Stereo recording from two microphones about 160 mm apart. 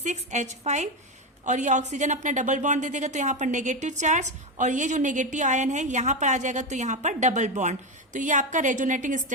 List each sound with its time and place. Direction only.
0.0 s a woman's voice: 50° right (ahead or behind)